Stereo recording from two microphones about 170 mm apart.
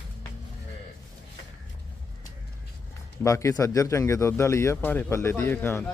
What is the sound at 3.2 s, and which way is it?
Speech, 15° left (ahead or behind).